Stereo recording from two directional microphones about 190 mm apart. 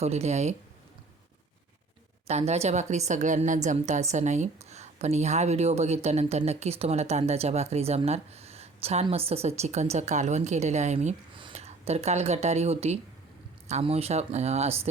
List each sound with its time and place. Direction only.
0.0 s a woman's voice: 35° right (ahead or behind)
2.2 s a woman's voice: 35° right (ahead or behind)